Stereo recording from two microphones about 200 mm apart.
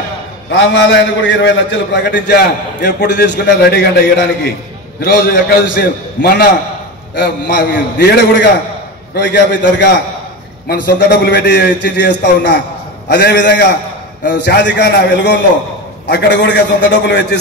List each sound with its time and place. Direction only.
0.5 s a man's voice: 60° left (ahead or behind)